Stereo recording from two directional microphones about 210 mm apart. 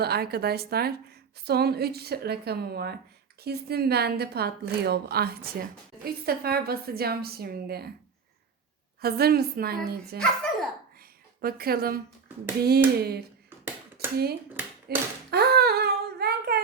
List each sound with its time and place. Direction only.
0.0 s a woman's voice: 50° right (ahead or behind)
9.0 s a woman's voice: 45° right (ahead or behind)
10.2 s a sound: 5° left (ahead or behind)
11.3 s a woman's voice: 45° right (ahead or behind)
13.0 s a woman's voice: 50° right (ahead or behind)
14.0 s a sound: 50° right (ahead or behind)